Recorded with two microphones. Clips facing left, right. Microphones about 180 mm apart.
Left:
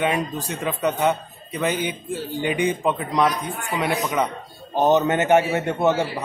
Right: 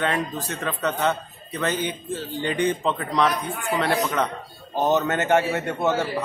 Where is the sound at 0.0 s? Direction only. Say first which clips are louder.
Left 2 dB; 10° left (ahead or behind).